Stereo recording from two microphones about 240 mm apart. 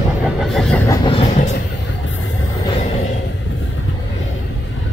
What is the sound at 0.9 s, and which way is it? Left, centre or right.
Vehicle, centre.